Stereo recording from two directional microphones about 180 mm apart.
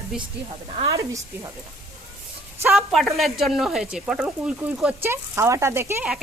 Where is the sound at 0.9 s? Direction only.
15° right (ahead or behind).